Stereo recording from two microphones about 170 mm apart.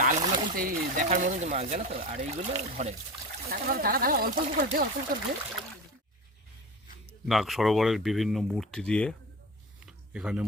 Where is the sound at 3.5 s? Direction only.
55° right (ahead or behind).